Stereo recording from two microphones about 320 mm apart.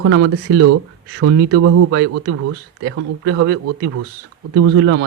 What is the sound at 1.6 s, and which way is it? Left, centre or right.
Speech, right.